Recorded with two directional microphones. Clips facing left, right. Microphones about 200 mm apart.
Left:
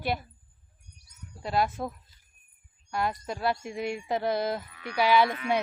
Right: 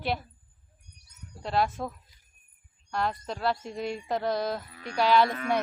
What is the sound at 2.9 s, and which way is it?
Speech, 10° left (ahead or behind).